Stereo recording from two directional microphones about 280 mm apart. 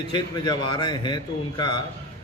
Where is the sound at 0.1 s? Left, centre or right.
Centre.